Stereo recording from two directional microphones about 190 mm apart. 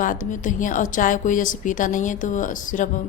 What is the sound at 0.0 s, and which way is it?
Speech, 45° left (ahead or behind).